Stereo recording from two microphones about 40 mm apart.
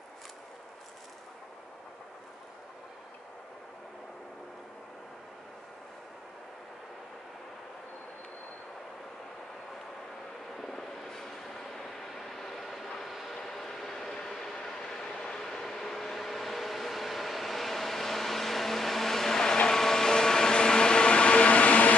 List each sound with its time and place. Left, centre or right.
10.6 s vehicle: centre; by 21.9 s left